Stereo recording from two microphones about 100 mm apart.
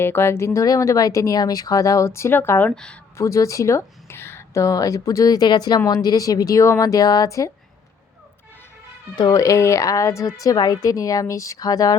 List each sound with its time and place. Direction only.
0.0 s speech: 25° left (ahead or behind)
2.7 s speech: 10° left (ahead or behind)
3.2 s speech: 30° left (ahead or behind)
9.3 s speech: 30° left (ahead or behind)